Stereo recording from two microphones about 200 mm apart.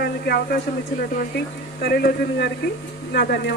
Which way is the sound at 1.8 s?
50° left (ahead or behind).